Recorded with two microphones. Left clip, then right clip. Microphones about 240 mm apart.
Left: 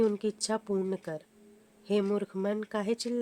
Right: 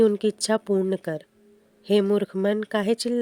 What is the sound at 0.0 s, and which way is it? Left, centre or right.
Speech, right.